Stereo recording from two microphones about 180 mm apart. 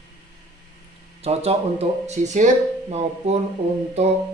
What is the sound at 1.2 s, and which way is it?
Speech, 35° right (ahead or behind).